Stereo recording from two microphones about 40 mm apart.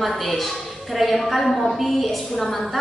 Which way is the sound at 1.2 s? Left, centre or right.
Centre.